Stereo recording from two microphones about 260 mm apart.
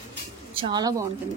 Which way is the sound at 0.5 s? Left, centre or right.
Centre.